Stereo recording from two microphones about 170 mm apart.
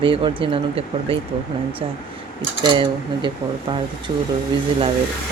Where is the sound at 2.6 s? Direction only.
30° right (ahead or behind).